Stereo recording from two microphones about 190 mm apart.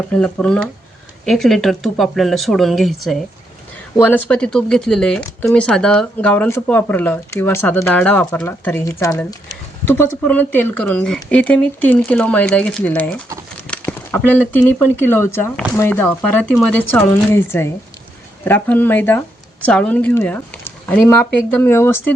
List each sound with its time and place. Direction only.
0.1 s speech: 5° left (ahead or behind)